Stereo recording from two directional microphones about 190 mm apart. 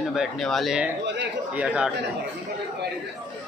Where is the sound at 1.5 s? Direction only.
5° right (ahead or behind).